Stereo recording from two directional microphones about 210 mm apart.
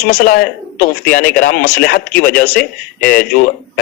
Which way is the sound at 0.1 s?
45° left (ahead or behind).